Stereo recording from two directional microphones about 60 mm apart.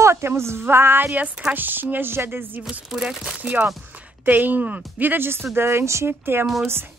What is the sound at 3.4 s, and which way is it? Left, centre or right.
Speech, right.